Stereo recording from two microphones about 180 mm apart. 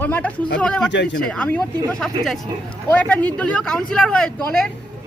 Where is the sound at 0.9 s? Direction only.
85° left.